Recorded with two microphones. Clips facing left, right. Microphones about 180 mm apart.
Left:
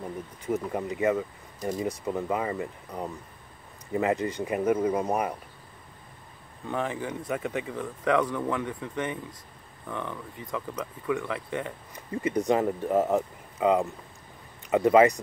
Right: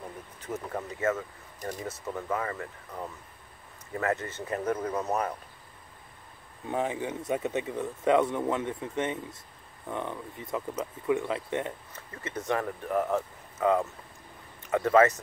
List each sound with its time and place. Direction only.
0.4 s speech: 10° left (ahead or behind)
6.7 s speech: 20° right (ahead or behind)
11.9 s speech: 15° left (ahead or behind)